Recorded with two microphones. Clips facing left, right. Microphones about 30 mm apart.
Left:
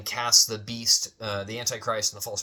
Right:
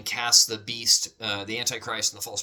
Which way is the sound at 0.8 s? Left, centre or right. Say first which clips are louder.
Right 1 dB; right.